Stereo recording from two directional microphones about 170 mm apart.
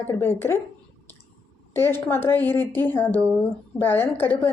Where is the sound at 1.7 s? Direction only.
15° left (ahead or behind).